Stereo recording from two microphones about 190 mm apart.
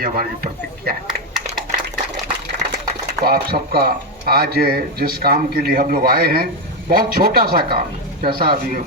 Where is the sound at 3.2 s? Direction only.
55° right (ahead or behind).